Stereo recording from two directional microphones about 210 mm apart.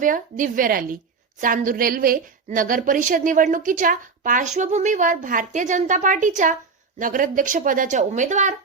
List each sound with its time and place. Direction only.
0.0 s a woman's voice: 40° right (ahead or behind)